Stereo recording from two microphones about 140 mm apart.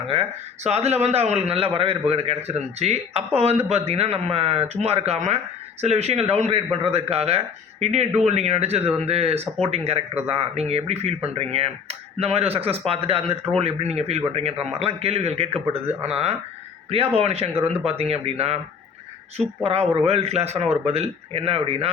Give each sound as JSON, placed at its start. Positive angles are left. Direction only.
{"t": 0.1, "sound": "speech", "side_deg": -45}
{"t": 19.6, "sound": "speech", "side_deg": -45}